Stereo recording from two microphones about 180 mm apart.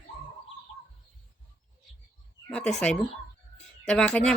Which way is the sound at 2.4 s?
5° left (ahead or behind).